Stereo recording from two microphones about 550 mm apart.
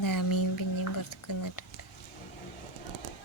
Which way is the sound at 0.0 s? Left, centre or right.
Left.